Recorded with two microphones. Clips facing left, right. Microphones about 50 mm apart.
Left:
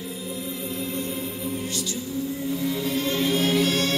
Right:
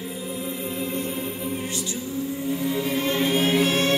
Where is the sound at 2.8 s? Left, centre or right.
Right.